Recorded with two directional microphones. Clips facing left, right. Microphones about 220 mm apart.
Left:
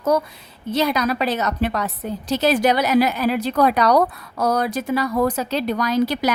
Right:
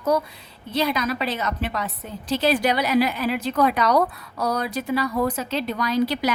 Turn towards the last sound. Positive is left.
turn(degrees=45)  # may be behind; listen again after turning